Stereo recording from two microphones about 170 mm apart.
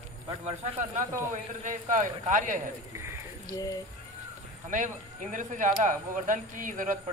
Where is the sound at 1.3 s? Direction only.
45° right (ahead or behind).